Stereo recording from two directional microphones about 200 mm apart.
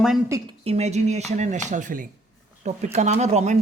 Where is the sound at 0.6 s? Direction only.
35° right (ahead or behind).